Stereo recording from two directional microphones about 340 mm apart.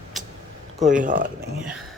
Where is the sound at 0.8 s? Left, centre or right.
Right.